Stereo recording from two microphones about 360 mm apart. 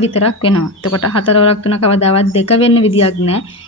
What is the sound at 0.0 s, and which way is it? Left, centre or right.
Speech, centre.